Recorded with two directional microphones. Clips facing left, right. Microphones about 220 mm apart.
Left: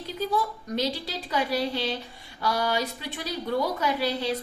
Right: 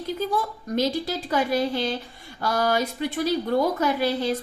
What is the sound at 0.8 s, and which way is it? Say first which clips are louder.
A woman's voice: right 5 dB; 50° right (ahead or behind).